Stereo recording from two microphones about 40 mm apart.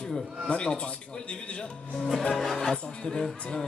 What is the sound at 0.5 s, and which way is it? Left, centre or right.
Speech, left.